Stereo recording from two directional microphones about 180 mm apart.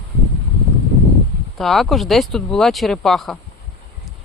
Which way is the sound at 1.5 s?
Centre (ahead or behind).